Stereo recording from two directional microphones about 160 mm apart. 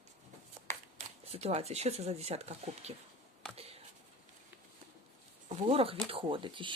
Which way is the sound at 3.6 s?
40° right (ahead or behind).